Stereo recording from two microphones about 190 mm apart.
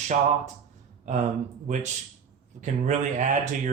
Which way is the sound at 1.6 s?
40° right (ahead or behind).